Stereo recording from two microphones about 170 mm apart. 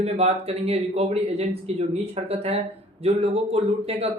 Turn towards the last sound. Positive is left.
turn(degrees=-35)  # may be behind; listen again after turning